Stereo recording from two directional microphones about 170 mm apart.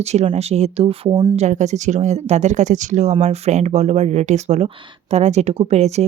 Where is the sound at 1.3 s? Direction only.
40° right (ahead or behind).